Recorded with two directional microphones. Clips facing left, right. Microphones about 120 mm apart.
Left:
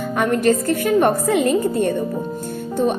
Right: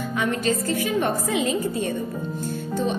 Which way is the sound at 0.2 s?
55° left (ahead or behind).